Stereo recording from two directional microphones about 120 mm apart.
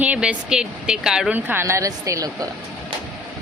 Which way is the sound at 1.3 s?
15° right (ahead or behind).